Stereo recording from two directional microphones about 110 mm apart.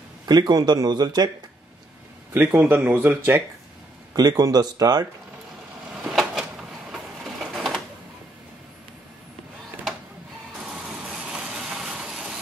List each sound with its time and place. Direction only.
0.3 s speech: 35° right (ahead or behind)
2.3 s speech: 20° right (ahead or behind)
4.1 s speech: 35° right (ahead or behind)
6.0 s a sound: 5° right (ahead or behind)
6.9 s printer: centre (ahead or behind)
10.7 s vehicle: 5° right (ahead or behind)